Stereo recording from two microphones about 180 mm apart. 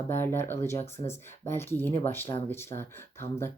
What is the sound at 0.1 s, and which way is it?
Speech, 10° left (ahead or behind).